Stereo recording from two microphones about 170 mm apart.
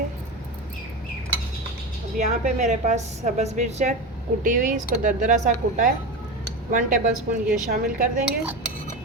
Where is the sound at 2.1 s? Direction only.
45° right (ahead or behind).